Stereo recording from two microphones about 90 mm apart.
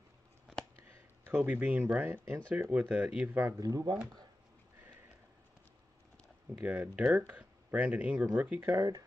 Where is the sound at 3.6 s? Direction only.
40° right (ahead or behind).